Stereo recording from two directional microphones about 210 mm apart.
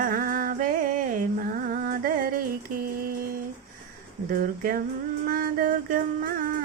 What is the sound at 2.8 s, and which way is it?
Music, 45° right (ahead or behind).